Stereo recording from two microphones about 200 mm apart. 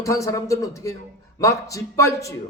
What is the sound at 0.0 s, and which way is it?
A man's voice, 15° left (ahead or behind).